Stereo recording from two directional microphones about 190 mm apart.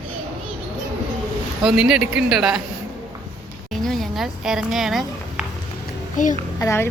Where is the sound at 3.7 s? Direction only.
Centre (ahead or behind).